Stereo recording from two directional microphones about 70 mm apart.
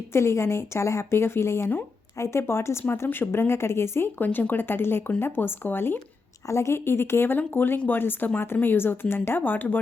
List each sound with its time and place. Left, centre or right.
0.1 s speech: left
4.2 s speech: left
6.5 s speech: left